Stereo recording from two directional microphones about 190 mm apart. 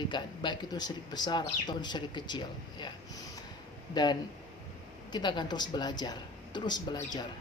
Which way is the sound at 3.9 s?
20° left (ahead or behind).